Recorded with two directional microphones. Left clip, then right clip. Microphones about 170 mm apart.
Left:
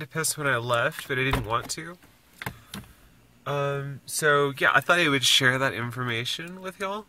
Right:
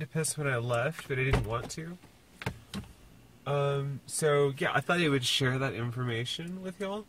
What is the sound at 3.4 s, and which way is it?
Speech, 5° left (ahead or behind).